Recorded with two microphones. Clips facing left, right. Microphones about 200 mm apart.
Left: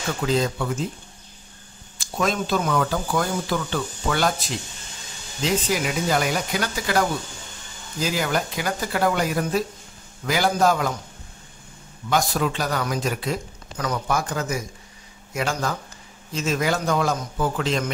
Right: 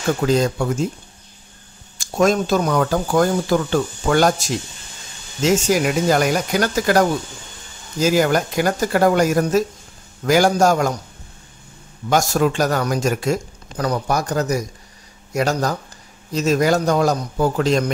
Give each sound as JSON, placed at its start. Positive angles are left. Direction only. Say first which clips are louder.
{"t": 0.2, "sound": "speech", "louder": "right 2 dB", "side_deg": -45}
{"t": 2.0, "sound": "speech", "louder": "right 7 dB", "side_deg": -45}
{"t": 5.7, "sound": "speech", "louder": "right 6 dB", "side_deg": -45}
{"t": 12.1, "sound": "a man's voice", "louder": "right 5 dB", "side_deg": -45}